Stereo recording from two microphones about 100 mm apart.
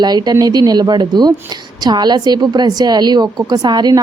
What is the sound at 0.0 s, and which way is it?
A woman's voice, 45° right (ahead or behind).